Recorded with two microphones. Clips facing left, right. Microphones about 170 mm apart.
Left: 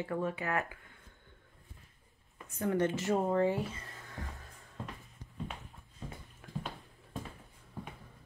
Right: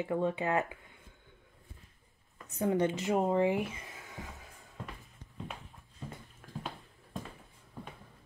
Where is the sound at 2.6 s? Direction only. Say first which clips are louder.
Right 2 dB; 15° right (ahead or behind).